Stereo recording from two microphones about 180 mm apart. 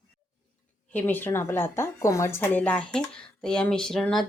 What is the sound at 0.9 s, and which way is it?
Speech, 10° left (ahead or behind).